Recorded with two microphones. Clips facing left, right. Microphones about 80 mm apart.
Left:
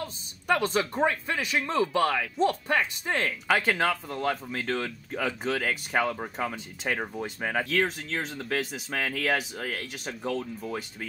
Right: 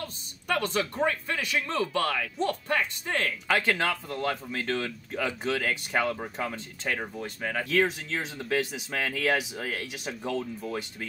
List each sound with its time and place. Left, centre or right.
0.0 s speech: centre
7.2 s speech: left
7.6 s speech: centre